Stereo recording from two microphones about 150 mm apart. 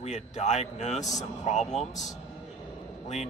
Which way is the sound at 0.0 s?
50° left (ahead or behind).